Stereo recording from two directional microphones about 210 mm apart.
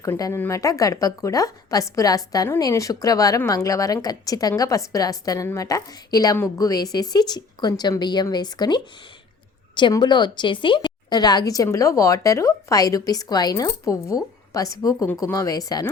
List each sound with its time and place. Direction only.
0.0 s a woman's voice: 15° left (ahead or behind)